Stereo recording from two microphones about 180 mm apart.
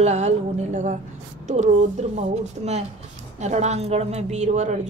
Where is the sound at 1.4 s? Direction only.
40° right (ahead or behind).